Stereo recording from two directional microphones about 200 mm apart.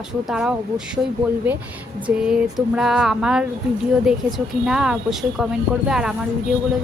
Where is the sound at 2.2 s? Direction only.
5° right (ahead or behind).